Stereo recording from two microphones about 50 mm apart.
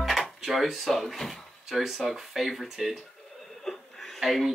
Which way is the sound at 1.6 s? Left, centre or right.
Centre.